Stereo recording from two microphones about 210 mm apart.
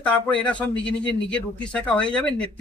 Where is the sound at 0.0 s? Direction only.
5° left (ahead or behind).